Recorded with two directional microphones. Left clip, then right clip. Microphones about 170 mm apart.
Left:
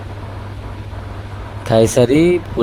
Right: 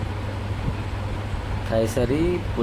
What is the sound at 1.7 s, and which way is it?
Speech, 45° left (ahead or behind).